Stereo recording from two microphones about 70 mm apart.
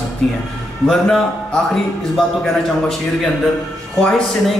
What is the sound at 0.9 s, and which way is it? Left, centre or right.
A man's voice, centre.